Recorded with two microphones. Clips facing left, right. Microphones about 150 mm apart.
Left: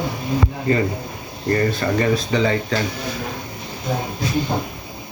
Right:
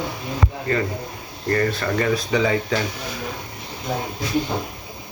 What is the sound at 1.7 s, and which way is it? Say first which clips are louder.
Speech: left 2 dB; 5° left (ahead or behind).